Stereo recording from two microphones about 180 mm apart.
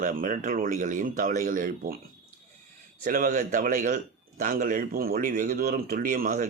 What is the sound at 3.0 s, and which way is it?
A man's voice, 50° right (ahead or behind).